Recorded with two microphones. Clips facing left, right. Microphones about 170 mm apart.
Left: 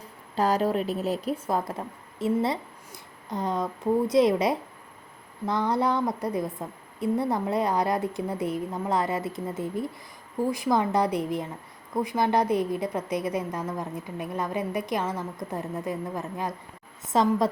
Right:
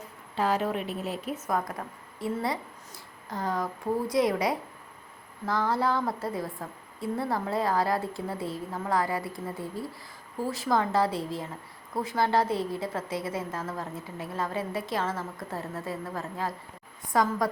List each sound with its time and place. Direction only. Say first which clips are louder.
0.3 s a woman's voice: left 3 dB; 40° left (ahead or behind); by 17.5 s 25° left (ahead or behind)